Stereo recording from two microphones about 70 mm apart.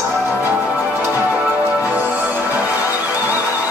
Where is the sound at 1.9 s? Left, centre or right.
Right.